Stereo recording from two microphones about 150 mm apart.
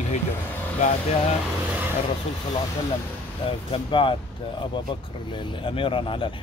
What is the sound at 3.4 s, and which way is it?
Speech, 35° left (ahead or behind).